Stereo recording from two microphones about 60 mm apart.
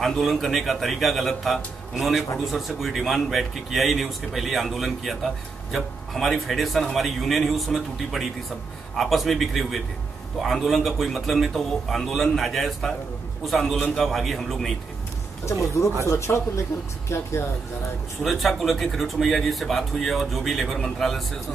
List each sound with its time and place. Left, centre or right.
0.0 s a man's voice: centre
15.4 s speech: left
18.2 s a man's voice: centre